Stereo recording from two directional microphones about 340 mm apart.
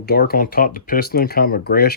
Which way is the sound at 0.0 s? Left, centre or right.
Left.